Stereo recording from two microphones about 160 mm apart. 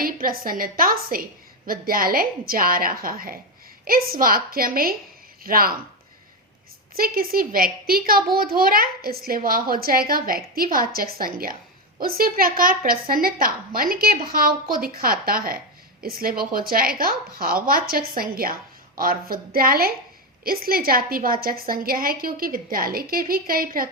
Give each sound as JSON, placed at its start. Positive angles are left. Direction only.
{"t": 0.0, "sound": "a woman's voice", "side_deg": -65}
{"t": 6.9, "sound": "a child's voice", "side_deg": -65}